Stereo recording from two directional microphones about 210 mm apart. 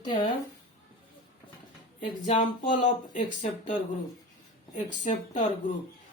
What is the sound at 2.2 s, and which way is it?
Speech, 35° left (ahead or behind).